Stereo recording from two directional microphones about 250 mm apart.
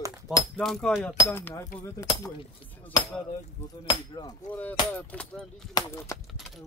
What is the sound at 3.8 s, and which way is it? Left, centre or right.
Speech, centre.